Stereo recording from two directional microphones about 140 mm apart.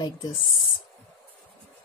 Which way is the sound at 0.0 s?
35° left (ahead or behind).